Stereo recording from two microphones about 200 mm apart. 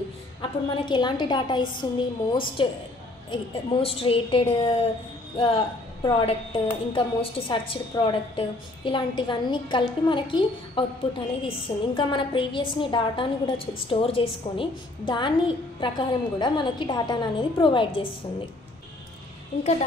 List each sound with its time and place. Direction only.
0.4 s a woman's voice: 25° left (ahead or behind)
3.8 s a woman's voice: 30° left (ahead or behind)
19.5 s speech: 30° left (ahead or behind)